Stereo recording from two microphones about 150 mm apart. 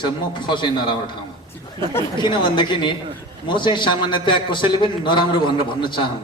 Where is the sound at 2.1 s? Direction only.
30° left (ahead or behind).